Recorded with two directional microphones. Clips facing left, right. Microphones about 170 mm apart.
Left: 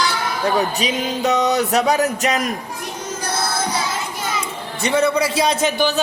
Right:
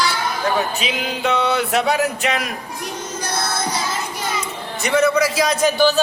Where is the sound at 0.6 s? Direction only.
40° left (ahead or behind).